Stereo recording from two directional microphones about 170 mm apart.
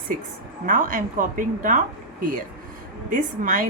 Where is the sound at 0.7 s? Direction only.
50° right (ahead or behind).